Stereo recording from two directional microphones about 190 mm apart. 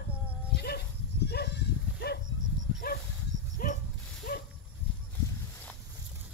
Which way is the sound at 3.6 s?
50° left (ahead or behind).